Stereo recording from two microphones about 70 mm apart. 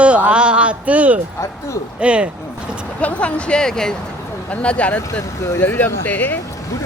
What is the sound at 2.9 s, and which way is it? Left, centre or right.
Speech, centre.